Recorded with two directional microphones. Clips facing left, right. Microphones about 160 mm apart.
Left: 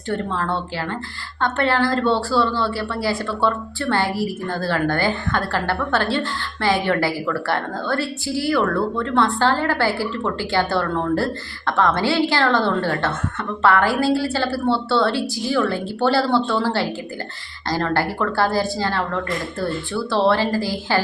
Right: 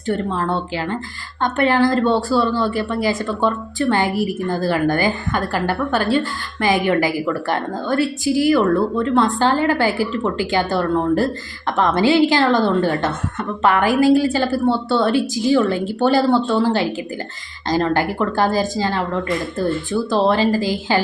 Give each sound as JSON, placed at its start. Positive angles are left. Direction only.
{"t": 0.1, "sound": "speech", "side_deg": -15}